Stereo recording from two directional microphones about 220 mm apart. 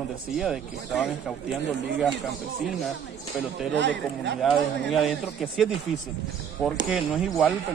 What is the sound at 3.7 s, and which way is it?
Speech, 55° right (ahead or behind).